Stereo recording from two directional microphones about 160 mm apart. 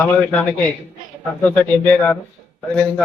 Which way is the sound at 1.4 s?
10° left (ahead or behind).